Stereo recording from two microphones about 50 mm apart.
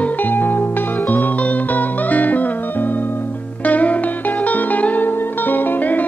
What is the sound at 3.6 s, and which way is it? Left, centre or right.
Music, left.